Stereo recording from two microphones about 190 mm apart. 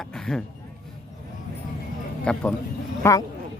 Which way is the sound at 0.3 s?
5° left (ahead or behind).